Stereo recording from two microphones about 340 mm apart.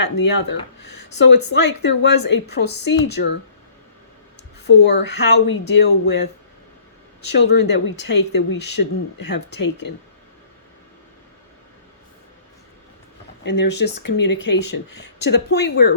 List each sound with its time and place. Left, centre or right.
0.0 s speech: left
1.4 s speech: left
1.8 s speech: left
4.6 s speech: left
7.3 s speech: left
13.4 s speech: left